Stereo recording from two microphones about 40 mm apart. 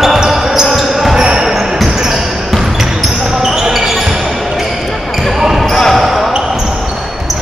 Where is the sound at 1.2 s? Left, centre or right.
Centre.